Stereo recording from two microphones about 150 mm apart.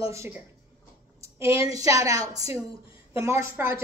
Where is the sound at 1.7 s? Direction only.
20° right (ahead or behind).